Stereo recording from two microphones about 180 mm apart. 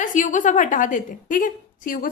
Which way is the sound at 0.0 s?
45° left (ahead or behind).